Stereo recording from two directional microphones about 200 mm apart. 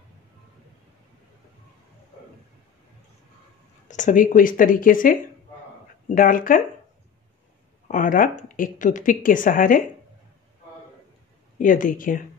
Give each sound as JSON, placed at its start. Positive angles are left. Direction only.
{"t": 3.9, "sound": "speech", "side_deg": 40}
{"t": 7.9, "sound": "speech", "side_deg": 40}
{"t": 11.5, "sound": "speech", "side_deg": 40}